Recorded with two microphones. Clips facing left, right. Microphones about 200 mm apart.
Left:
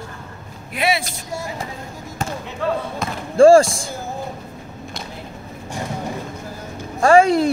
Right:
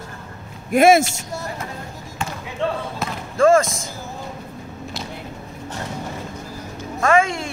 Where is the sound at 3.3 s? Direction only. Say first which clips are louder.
Left 5 dB; 30° left (ahead or behind).